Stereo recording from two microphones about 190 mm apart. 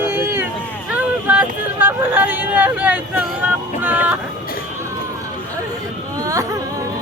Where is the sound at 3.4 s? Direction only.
10° right (ahead or behind).